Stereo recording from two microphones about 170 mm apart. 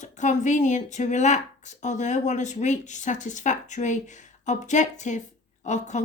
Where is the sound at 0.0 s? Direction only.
45° left (ahead or behind).